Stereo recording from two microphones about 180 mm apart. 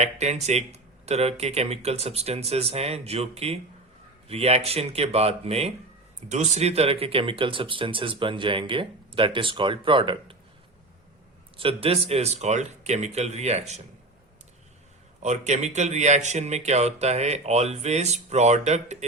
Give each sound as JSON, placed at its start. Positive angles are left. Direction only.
{"t": 0.0, "sound": "speech", "side_deg": -35}
{"t": 11.5, "sound": "speech", "side_deg": -30}
{"t": 15.2, "sound": "speech", "side_deg": -40}